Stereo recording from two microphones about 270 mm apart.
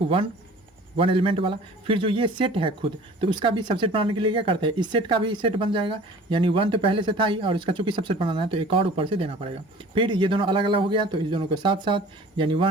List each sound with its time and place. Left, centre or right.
0.9 s speech: centre